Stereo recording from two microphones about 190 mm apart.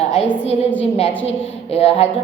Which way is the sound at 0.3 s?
35° left (ahead or behind).